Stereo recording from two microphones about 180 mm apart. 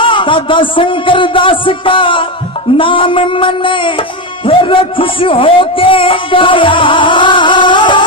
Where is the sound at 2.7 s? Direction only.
30° left (ahead or behind).